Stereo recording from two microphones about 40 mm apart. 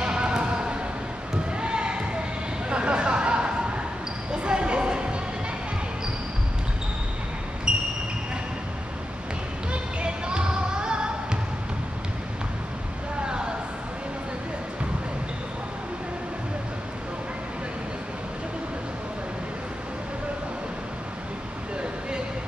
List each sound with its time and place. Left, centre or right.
0.0 s a sound: right
1.6 s basketball bounce: right
2.7 s a sound: right
4.3 s basketball bounce: right
7.7 s basketball bounce: right
9.7 s music: right